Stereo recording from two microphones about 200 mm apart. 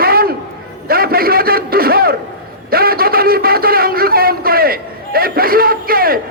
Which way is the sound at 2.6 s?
50° right (ahead or behind).